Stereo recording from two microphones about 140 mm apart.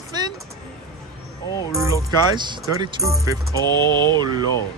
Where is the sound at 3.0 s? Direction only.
25° right (ahead or behind).